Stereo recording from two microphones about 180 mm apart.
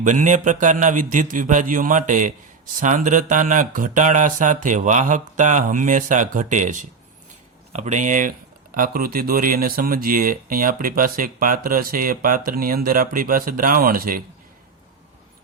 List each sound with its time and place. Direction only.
0.0 s speech: 45° right (ahead or behind)